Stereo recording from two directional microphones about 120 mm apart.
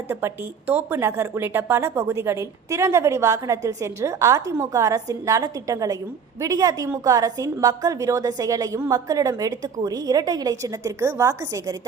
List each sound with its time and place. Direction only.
0.7 s a woman's voice: 20° right (ahead or behind)